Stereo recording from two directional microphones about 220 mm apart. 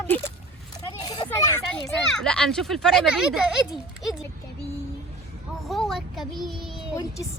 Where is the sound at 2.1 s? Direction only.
5° left (ahead or behind).